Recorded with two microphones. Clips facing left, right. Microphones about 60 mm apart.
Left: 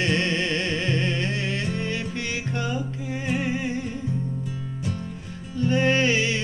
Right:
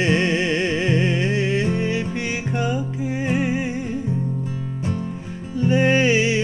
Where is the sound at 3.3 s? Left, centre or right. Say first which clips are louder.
Right 3 dB; centre.